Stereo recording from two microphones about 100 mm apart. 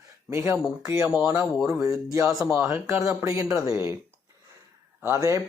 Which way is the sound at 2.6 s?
20° right (ahead or behind).